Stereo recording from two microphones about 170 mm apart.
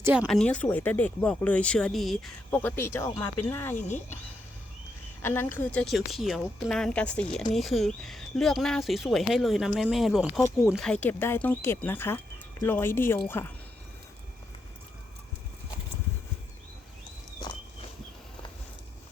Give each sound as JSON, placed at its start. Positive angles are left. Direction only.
{"t": 0.0, "sound": "speech", "side_deg": -5}
{"t": 0.3, "sound": "speech", "side_deg": 5}
{"t": 2.5, "sound": "speech", "side_deg": 10}
{"t": 3.8, "sound": "speech", "side_deg": 45}
{"t": 5.2, "sound": "speech", "side_deg": 15}
{"t": 10.8, "sound": "speech", "side_deg": 10}